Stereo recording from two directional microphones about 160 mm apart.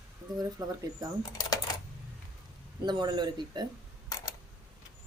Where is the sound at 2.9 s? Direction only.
30° right (ahead or behind).